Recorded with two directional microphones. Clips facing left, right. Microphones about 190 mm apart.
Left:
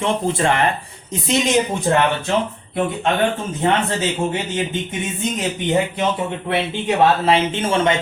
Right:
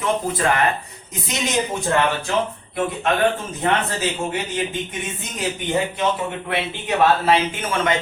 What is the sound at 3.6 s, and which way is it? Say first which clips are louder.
A man's voice: left 3 dB; 25° left (ahead or behind).